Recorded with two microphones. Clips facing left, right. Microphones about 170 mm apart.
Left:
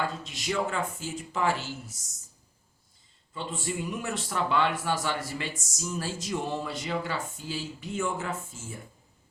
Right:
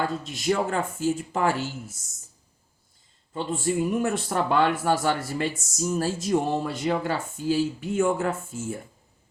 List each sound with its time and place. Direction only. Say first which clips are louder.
0.0 s a man's voice: right 5 dB; 50° right (ahead or behind)
3.3 s a man's voice: right 8 dB; 45° right (ahead or behind)